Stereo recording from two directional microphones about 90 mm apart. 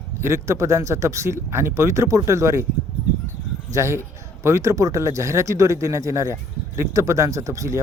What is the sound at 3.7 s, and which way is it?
Speech, 30° right (ahead or behind).